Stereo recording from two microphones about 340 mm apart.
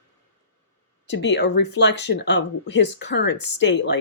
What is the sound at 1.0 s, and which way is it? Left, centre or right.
Speech, left.